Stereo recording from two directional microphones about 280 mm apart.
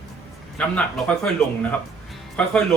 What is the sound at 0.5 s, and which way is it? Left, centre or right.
Speech, centre.